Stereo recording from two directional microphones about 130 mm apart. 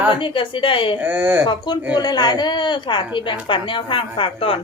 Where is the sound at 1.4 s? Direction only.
35° left (ahead or behind).